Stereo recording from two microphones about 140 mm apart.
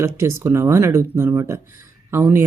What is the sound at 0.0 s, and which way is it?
Speech, 20° right (ahead or behind).